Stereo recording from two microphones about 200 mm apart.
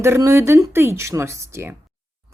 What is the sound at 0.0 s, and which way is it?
A woman's voice, 15° right (ahead or behind).